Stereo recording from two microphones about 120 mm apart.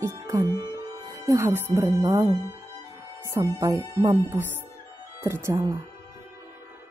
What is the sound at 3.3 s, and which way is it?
Speech, 25° right (ahead or behind).